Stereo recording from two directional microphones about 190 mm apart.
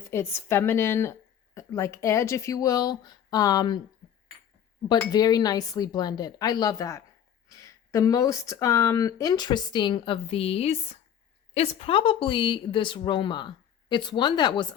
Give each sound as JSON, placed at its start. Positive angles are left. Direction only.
{"t": 0.1, "sound": "speech", "side_deg": 15}
{"t": 4.9, "sound": "speech", "side_deg": 20}